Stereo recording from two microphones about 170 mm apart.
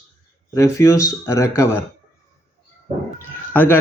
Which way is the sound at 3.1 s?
10° left (ahead or behind).